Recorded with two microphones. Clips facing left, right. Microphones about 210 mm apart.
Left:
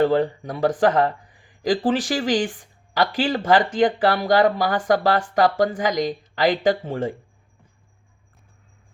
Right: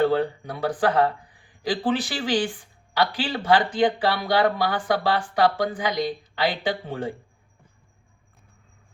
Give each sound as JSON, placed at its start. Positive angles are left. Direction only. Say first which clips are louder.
{"t": 0.0, "sound": "speech", "louder": "left 2 dB", "side_deg": 40}